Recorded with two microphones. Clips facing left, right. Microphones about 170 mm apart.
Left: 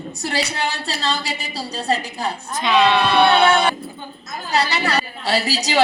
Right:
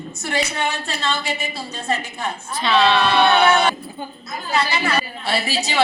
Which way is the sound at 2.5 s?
15° left (ahead or behind).